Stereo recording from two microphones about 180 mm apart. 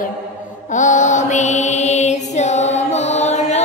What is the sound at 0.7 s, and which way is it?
Mantra, 45° left (ahead or behind).